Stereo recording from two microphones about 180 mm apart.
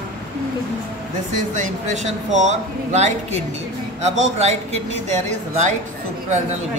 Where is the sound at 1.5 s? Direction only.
40° right (ahead or behind).